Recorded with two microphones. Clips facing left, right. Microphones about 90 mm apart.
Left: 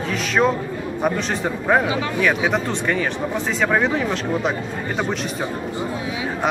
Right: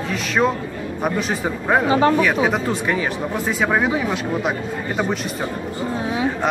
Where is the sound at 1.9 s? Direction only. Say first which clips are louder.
Right 8 dB; 45° right (ahead or behind).